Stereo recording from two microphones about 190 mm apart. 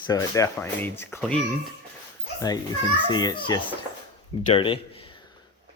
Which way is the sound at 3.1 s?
20° left (ahead or behind).